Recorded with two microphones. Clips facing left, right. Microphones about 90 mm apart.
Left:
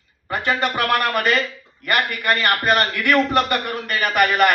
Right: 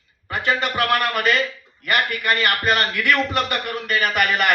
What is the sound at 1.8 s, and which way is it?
A man's voice, 45° left (ahead or behind).